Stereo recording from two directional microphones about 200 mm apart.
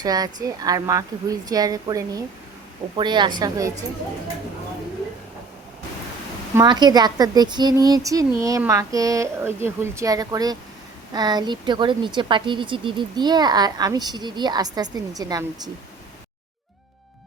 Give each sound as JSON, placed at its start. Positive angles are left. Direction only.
{"t": 0.0, "sound": "a woman's voice", "side_deg": -20}
{"t": 6.6, "sound": "a woman's voice", "side_deg": -20}